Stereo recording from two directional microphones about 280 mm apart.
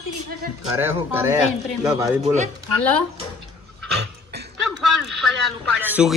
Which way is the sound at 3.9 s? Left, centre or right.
Right.